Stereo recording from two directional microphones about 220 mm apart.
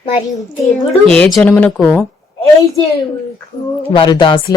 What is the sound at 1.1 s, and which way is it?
Speech, 5° left (ahead or behind).